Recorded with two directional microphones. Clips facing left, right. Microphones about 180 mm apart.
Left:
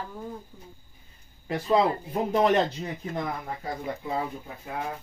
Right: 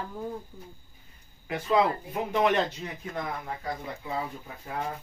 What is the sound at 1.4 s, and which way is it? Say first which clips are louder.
Speech: left 2 dB; 30° left (ahead or behind).